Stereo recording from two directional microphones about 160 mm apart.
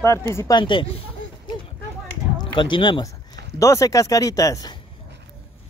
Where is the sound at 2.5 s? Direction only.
30° left (ahead or behind).